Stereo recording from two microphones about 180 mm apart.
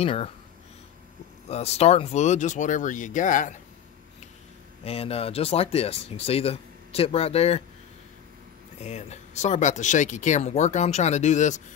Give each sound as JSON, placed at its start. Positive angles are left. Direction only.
{"t": 0.0, "sound": "speech", "side_deg": 35}
{"t": 1.5, "sound": "speech", "side_deg": 35}
{"t": 4.8, "sound": "speech", "side_deg": 35}
{"t": 8.8, "sound": "speech", "side_deg": 40}